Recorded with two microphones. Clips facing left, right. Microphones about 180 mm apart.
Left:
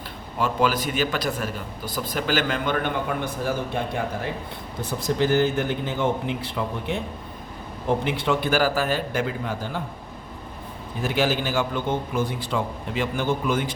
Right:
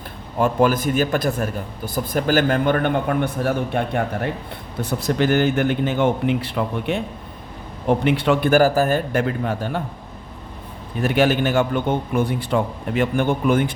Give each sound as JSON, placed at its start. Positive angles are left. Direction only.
{"t": 0.3, "sound": "a man's voice", "side_deg": -50}
{"t": 8.0, "sound": "a man's voice", "side_deg": -65}
{"t": 11.0, "sound": "a man's voice", "side_deg": -60}